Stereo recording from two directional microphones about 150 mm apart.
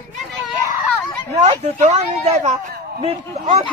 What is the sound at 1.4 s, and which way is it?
Speech, 50° right (ahead or behind).